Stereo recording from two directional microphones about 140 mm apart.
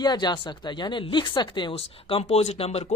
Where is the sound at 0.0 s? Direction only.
30° left (ahead or behind).